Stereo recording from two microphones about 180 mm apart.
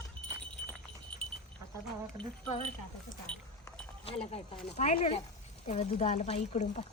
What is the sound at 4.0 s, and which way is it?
Speech, 35° left (ahead or behind).